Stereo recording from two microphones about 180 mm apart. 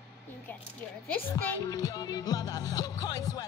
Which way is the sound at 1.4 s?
15° left (ahead or behind).